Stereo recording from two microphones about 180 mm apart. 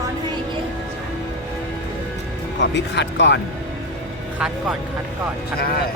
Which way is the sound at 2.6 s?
80° left.